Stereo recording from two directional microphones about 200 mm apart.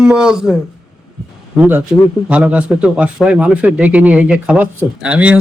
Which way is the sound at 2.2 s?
5° right (ahead or behind).